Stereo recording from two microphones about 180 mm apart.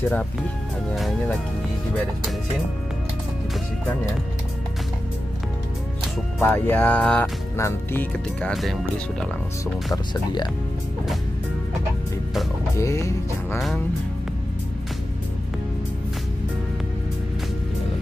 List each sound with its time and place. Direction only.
0.1 s speech: 5° left (ahead or behind)
6.4 s speech: 10° left (ahead or behind)
12.7 s speech: 15° left (ahead or behind)